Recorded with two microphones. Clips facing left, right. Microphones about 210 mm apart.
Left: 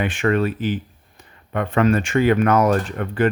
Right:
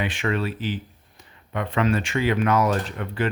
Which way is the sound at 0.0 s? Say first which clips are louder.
Left 6 dB; 50° left (ahead or behind).